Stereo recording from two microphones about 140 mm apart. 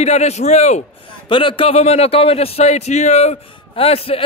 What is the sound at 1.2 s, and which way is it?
A man's voice, 40° left (ahead or behind).